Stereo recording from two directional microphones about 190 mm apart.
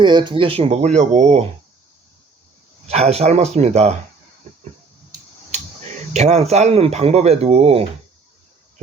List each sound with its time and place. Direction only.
0.0 s speech: 25° right (ahead or behind)
2.8 s speech: 35° right (ahead or behind)
6.1 s speech: 35° right (ahead or behind)